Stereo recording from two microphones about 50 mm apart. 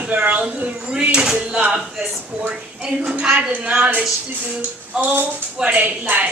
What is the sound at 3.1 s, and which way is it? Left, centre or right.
Speech, centre.